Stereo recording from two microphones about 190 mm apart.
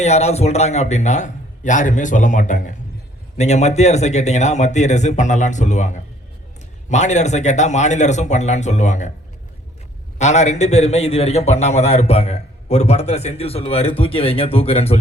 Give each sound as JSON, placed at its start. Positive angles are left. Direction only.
{"t": 0.0, "sound": "a man's voice", "side_deg": 35}
{"t": 10.2, "sound": "a man's voice", "side_deg": 35}